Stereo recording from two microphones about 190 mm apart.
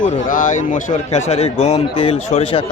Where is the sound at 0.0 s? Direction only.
45° left (ahead or behind).